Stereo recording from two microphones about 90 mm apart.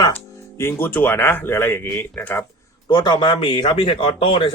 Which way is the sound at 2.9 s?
55° left (ahead or behind).